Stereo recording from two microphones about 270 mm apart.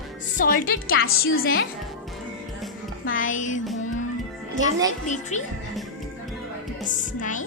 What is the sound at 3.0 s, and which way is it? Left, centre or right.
Music, left.